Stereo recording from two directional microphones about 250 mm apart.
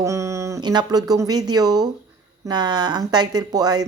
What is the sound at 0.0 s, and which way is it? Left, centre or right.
A woman's voice, centre.